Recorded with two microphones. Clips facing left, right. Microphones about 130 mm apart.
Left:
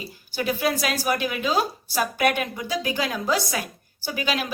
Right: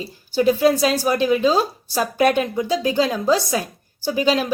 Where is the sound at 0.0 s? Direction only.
30° right (ahead or behind).